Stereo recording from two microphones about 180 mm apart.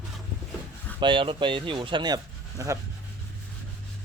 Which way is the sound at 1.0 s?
25° right (ahead or behind).